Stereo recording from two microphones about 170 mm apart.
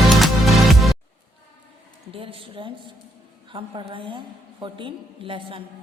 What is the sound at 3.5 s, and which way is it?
A woman's voice, 30° right (ahead or behind).